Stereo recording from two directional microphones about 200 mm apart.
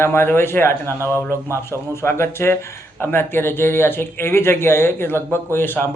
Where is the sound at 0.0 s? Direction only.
10° left (ahead or behind).